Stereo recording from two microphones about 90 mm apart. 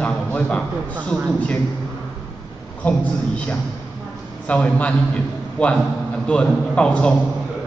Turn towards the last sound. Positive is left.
turn(degrees=10)  # may be behind; listen again after turning